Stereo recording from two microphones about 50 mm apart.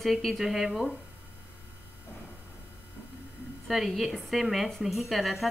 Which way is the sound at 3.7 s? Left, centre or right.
Centre.